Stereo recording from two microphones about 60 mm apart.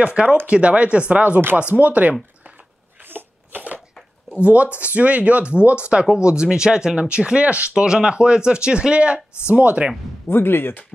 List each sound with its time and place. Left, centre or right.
0.0 s speech: centre
3.0 s a sound: right
4.4 s speech: right
10.2 s speech: left